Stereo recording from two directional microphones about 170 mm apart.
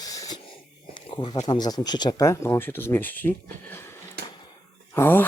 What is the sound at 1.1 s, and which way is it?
Speech, 25° left (ahead or behind).